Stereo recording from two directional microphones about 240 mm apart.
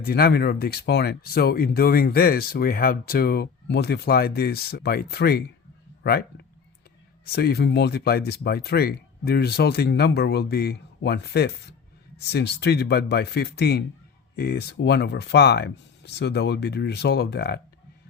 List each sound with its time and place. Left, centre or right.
0.0 s speech: left